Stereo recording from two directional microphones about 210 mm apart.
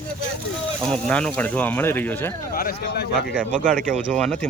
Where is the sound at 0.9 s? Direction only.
5° left (ahead or behind).